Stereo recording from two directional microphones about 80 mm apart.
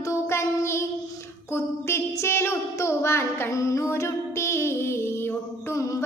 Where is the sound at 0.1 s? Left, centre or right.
Left.